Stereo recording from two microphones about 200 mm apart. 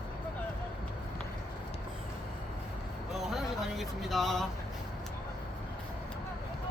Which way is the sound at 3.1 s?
Centre (ahead or behind).